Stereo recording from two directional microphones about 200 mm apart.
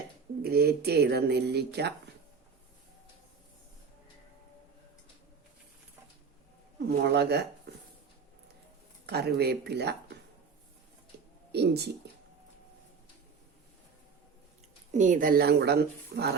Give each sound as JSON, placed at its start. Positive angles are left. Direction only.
{"t": 0.4, "sound": "speech", "side_deg": -50}
{"t": 6.8, "sound": "speech", "side_deg": -55}
{"t": 9.0, "sound": "speech", "side_deg": -55}
{"t": 11.1, "sound": "a sound", "side_deg": -55}
{"t": 11.5, "sound": "speech", "side_deg": -55}
{"t": 14.9, "sound": "speech", "side_deg": -40}